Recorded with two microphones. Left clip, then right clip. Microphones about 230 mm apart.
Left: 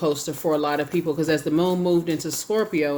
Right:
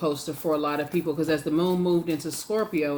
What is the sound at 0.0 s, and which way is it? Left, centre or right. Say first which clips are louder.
Speech: left 4 dB; left.